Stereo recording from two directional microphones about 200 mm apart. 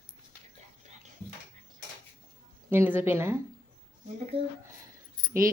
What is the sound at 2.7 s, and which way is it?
Speech, 10° right (ahead or behind).